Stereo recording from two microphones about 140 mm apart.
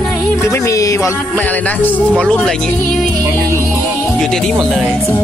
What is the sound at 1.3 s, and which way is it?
Speech, 10° left (ahead or behind).